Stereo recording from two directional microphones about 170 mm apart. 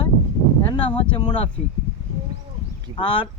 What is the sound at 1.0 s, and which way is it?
Speech, 30° left (ahead or behind).